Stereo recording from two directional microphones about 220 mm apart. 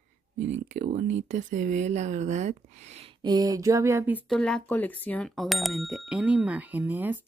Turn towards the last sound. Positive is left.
turn(degrees=-10)  # may be behind; listen again after turning